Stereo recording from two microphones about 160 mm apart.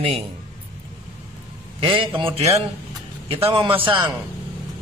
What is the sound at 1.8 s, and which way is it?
A man's voice, 35° right (ahead or behind).